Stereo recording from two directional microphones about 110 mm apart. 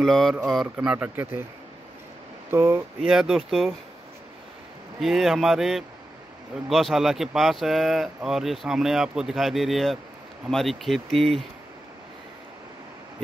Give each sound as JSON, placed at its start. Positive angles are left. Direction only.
{"t": 0.0, "sound": "speech", "side_deg": 0}
{"t": 0.7, "sound": "speech", "side_deg": -15}
{"t": 2.5, "sound": "speech", "side_deg": -20}
{"t": 3.0, "sound": "speech", "side_deg": -5}
{"t": 5.0, "sound": "speech", "side_deg": -5}